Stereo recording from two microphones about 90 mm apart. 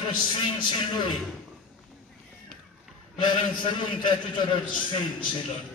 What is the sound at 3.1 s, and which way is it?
A man's voice, 60° left (ahead or behind).